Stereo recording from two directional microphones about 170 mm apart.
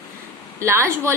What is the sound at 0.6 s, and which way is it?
Speech, 15° right (ahead or behind).